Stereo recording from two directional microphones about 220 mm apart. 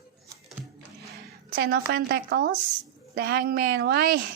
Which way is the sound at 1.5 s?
45° right (ahead or behind).